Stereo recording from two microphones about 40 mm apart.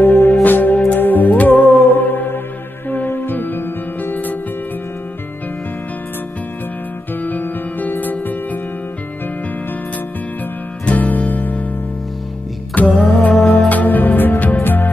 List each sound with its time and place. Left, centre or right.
0.0 s music: left
7.2 s music: left
10.9 s music: left
12.8 s music: left
13.7 s music: left